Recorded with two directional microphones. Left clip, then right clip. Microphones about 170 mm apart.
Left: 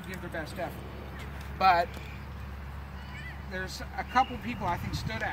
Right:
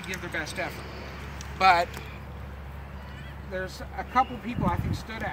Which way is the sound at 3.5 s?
25° left (ahead or behind).